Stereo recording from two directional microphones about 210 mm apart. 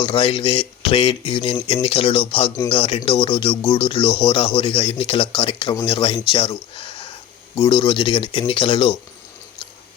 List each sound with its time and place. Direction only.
0.0 s speech: 30° left (ahead or behind)